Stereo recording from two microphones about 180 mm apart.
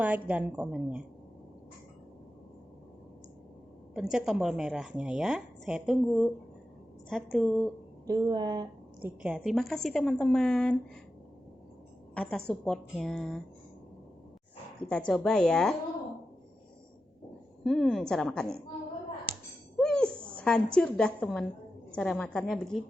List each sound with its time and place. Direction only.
0.0 s a woman's voice: 10° right (ahead or behind)
3.9 s a woman's voice: centre (ahead or behind)
8.0 s a woman's voice: 20° right (ahead or behind); by 10.8 s 5° left (ahead or behind)
12.1 s a woman's voice: 5° left (ahead or behind)
14.8 s a woman's voice: 5° left (ahead or behind)
17.6 s a woman's voice: centre (ahead or behind)
19.8 s a sound: 5° left (ahead or behind)
21.9 s a woman's voice: 5° left (ahead or behind)